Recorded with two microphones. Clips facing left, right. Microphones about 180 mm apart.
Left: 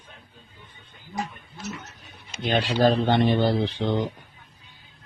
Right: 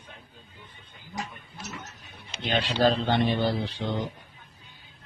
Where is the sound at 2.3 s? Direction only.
45° left (ahead or behind); by 4.0 s 60° left (ahead or behind).